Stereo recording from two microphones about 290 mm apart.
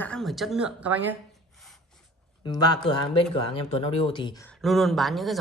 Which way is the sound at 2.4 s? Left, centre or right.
Centre.